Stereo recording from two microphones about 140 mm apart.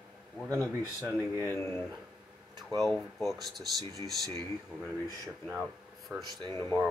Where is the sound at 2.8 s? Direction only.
Centre (ahead or behind).